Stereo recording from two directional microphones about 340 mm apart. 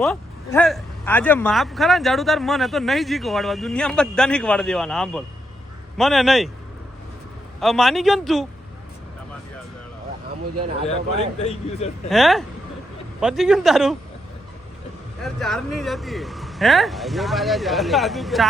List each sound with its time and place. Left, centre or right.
0.0 s speech: centre
7.6 s speech: centre
11.3 s speech: centre
12.0 s speech: centre
15.2 s speech: centre